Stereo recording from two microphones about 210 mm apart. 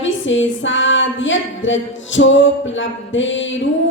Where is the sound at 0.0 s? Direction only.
65° left (ahead or behind).